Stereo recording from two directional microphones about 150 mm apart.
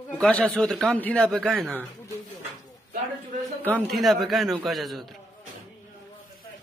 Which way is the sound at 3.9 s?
Centre (ahead or behind).